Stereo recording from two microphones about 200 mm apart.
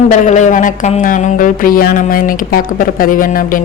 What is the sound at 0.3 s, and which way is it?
Speech, 35° left (ahead or behind).